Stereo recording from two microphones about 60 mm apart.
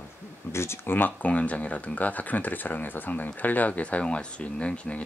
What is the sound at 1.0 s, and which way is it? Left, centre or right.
Speech, left.